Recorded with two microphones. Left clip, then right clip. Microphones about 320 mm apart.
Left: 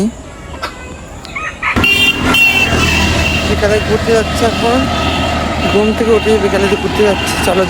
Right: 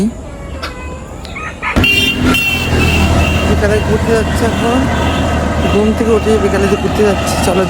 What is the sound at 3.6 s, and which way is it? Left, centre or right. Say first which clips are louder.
Speech: left 3 dB; centre.